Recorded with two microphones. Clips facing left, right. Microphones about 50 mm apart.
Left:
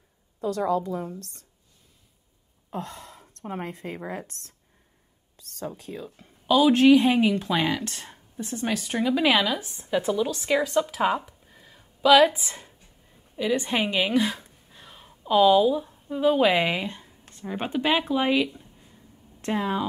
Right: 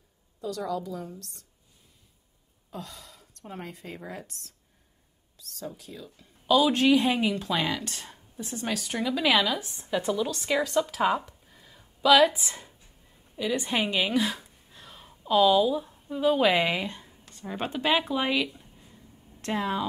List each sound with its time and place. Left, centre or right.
0.7 s a woman's voice: left
2.7 s a woman's voice: left
5.9 s a woman's voice: left
6.4 s a woman's voice: centre
7.5 s speech: centre
8.2 s a sound: centre
8.6 s speech: centre
17.2 s a sound: left
17.6 s speech: centre
18.2 s a sound: centre
19.5 s speech: centre